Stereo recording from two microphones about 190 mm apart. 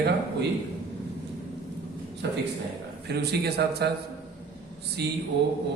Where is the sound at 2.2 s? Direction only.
65° right (ahead or behind).